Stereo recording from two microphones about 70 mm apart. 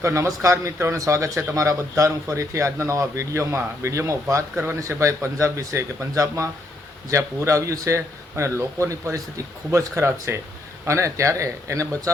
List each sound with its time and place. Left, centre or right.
0.0 s a man's voice: right